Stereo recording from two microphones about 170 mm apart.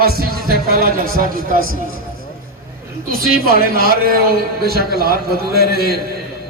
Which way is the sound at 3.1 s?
60° right (ahead or behind).